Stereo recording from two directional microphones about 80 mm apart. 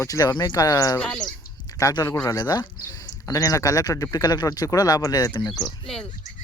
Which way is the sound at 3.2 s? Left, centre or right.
Left.